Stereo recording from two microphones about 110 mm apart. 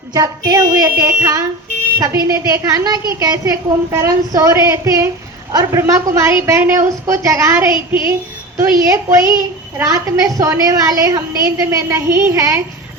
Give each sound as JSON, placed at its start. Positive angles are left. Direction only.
{"t": 0.1, "sound": "a woman's voice", "side_deg": -35}